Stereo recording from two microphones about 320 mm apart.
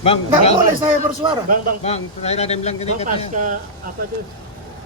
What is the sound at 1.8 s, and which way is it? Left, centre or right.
Speech, centre.